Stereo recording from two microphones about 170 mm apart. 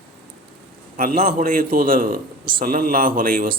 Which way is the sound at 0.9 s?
60° right (ahead or behind).